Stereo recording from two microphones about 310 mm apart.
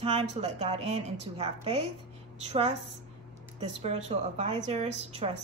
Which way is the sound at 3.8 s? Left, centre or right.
Right.